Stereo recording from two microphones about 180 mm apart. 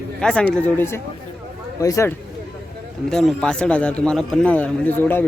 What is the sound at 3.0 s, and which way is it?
A man's voice, centre (ahead or behind).